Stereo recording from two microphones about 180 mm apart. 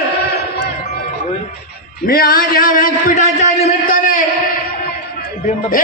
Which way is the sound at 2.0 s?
55° left (ahead or behind).